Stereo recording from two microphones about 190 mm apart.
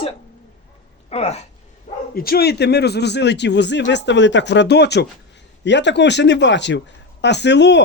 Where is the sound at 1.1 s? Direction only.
35° left (ahead or behind).